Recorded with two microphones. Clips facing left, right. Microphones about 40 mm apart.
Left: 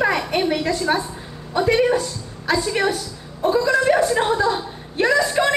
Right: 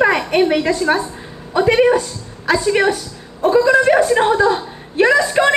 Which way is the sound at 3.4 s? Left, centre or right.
Centre.